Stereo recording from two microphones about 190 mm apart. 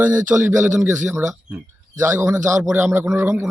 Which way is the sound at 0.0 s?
10° right (ahead or behind).